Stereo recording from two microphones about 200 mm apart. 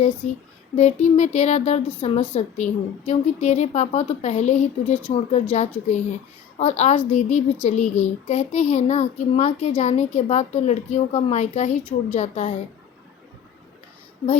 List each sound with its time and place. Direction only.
0.8 s a child's voice: 35° left (ahead or behind)